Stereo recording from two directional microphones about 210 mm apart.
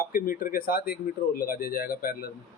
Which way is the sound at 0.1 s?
40° left (ahead or behind).